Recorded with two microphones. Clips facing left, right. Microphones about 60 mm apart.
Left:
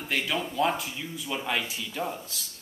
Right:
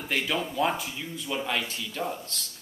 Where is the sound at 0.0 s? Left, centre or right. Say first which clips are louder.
Right 1 dB; centre.